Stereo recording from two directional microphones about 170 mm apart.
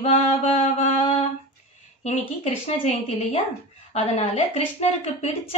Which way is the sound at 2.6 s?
40° left (ahead or behind).